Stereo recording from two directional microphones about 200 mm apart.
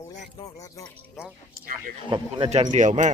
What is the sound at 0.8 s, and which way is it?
Speech, 5° left (ahead or behind).